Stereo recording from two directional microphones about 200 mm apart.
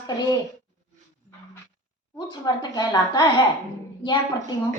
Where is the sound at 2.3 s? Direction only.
20° left (ahead or behind).